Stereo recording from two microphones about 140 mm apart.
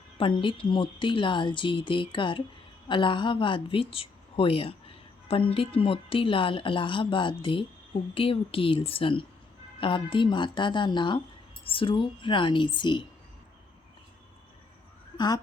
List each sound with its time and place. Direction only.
0.2 s speech: 35° left (ahead or behind)